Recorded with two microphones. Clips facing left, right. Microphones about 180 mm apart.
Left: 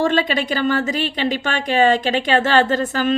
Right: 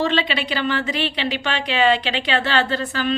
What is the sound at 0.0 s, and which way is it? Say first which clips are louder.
A woman's voice: left 3 dB; 45° left (ahead or behind).